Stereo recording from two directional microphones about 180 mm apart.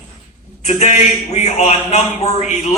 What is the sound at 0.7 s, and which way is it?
A man's voice, 40° left (ahead or behind).